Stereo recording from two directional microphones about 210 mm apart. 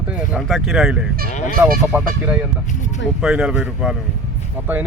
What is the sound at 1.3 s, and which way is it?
Speech, 35° left (ahead or behind).